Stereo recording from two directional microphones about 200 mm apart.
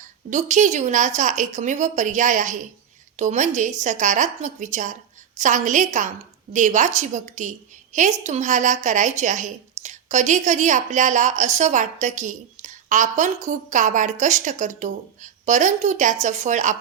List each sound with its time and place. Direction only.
0.3 s a woman's voice: 35° right (ahead or behind)